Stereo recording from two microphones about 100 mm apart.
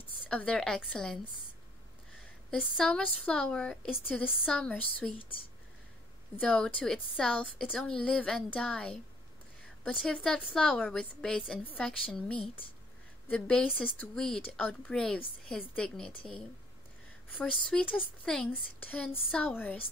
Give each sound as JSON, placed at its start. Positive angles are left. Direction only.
{"t": 0.3, "sound": "a woman's voice", "side_deg": 10}
{"t": 2.8, "sound": "a woman's voice", "side_deg": 5}
{"t": 6.4, "sound": "a woman's voice", "side_deg": 10}
{"t": 13.7, "sound": "a woman's voice", "side_deg": -5}
{"t": 13.9, "sound": "a woman's voice", "side_deg": 5}
{"t": 17.3, "sound": "a woman's voice", "side_deg": 15}
{"t": 18.5, "sound": "a woman's voice", "side_deg": 15}